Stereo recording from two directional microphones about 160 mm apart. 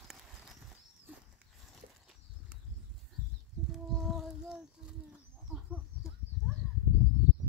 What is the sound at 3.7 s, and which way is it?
Child singing, centre (ahead or behind).